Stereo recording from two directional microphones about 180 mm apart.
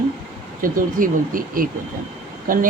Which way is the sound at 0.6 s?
50° right (ahead or behind).